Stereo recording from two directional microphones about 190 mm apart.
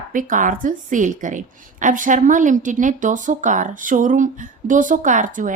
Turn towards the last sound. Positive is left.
turn(degrees=-45)  # may be behind; listen again after turning